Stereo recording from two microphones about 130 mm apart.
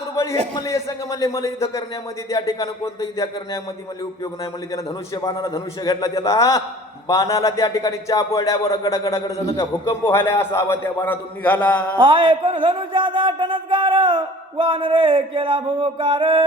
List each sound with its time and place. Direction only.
0.6 s speech: 25° left (ahead or behind)
4.7 s a man's voice: 30° left (ahead or behind); by 11.9 s 10° left (ahead or behind)
11.9 s speech: 40° right (ahead or behind)